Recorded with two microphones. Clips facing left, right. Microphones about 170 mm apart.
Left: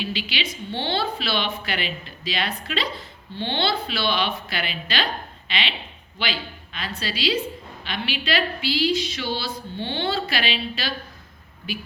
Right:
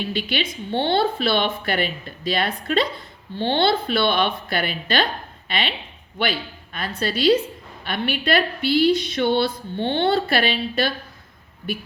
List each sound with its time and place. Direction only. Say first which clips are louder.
0.0 s a woman's voice: right 4 dB; 55° right (ahead or behind)
6.7 s a woman's voice: right 6 dB; 55° right (ahead or behind)